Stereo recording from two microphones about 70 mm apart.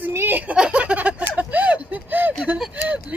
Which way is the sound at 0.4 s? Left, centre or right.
Centre.